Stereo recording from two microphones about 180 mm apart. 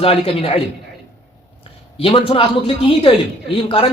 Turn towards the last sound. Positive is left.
turn(degrees=30)  # may be behind; listen again after turning